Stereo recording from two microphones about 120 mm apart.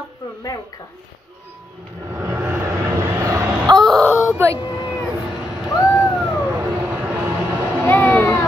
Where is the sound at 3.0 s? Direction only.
20° right (ahead or behind).